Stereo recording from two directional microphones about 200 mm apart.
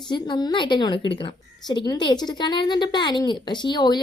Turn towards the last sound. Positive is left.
turn(degrees=20)  # may be behind; listen again after turning